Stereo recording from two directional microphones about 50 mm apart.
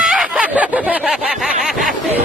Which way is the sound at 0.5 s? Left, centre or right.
Right.